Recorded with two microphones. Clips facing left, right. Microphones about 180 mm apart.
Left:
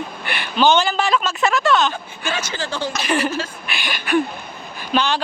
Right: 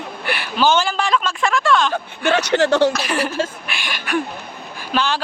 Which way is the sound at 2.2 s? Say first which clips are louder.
Right 10 dB; 65° right (ahead or behind).